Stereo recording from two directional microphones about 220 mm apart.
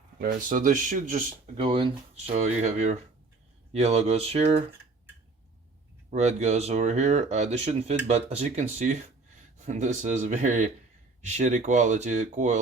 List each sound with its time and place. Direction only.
0.2 s speech: 40° right (ahead or behind)
1.5 s speech: 25° right (ahead or behind)
6.1 s speech: 30° right (ahead or behind)